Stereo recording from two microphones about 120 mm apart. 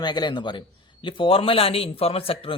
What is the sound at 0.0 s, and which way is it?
A man's voice, 35° left (ahead or behind).